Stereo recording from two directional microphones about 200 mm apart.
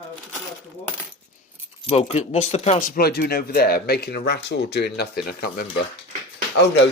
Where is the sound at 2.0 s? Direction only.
35° left (ahead or behind); by 5.6 s 50° left (ahead or behind).